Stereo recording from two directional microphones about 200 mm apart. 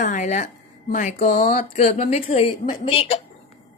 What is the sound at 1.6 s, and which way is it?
A woman's voice, 30° left (ahead or behind).